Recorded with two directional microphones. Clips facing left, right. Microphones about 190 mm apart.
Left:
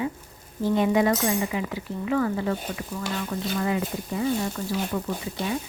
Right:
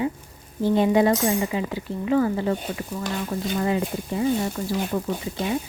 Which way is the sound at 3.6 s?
25° right (ahead or behind).